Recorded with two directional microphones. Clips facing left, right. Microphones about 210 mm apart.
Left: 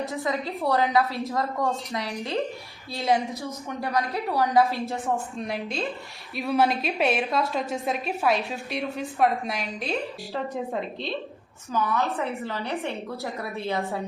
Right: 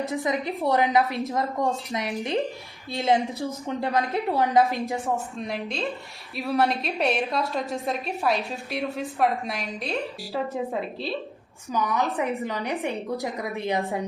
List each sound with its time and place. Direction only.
0.1 s a woman's voice: 15° right (ahead or behind)
5.4 s a woman's voice: centre (ahead or behind)
11.7 s a woman's voice: 15° right (ahead or behind)